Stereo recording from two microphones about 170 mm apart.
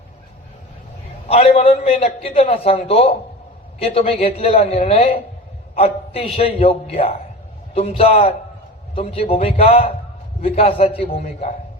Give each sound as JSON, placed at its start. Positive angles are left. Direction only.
{"t": 1.3, "sound": "a man's voice", "side_deg": 35}